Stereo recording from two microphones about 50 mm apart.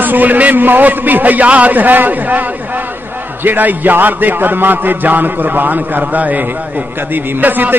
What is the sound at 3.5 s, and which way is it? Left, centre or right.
A man's voice, right.